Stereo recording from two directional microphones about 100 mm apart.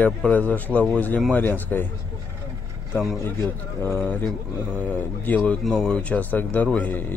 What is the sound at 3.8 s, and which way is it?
A man's voice, 20° left (ahead or behind).